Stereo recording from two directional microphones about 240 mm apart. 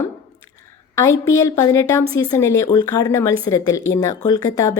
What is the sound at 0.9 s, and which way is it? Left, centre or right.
A woman's voice, centre.